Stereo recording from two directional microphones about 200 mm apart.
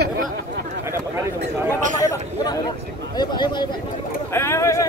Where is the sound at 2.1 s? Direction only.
20° left (ahead or behind).